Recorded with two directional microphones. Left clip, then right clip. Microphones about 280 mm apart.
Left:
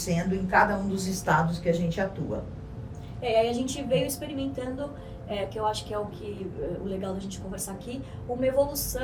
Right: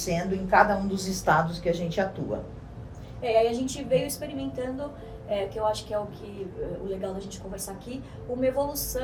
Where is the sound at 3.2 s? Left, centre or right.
Centre.